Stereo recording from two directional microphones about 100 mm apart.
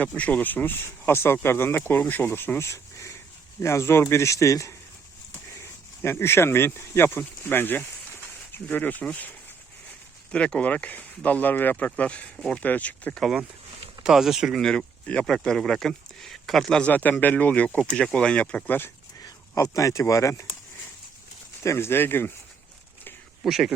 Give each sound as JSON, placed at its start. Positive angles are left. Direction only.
{"t": 0.0, "sound": "speech", "side_deg": 15}
{"t": 10.3, "sound": "speech", "side_deg": 10}
{"t": 14.0, "sound": "speech", "side_deg": -5}
{"t": 14.6, "sound": "speech", "side_deg": 10}
{"t": 16.9, "sound": "speech", "side_deg": 15}
{"t": 19.2, "sound": "speech", "side_deg": 35}
{"t": 21.6, "sound": "speech", "side_deg": 25}
{"t": 23.4, "sound": "a man's voice", "side_deg": -5}